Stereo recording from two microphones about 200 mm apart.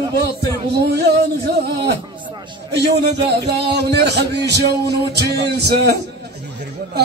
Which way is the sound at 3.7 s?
55° right (ahead or behind).